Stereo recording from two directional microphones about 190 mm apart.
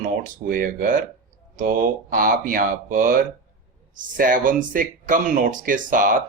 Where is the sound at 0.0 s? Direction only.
45° right (ahead or behind).